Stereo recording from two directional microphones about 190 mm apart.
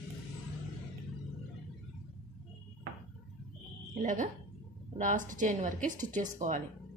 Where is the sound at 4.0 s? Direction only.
45° right (ahead or behind).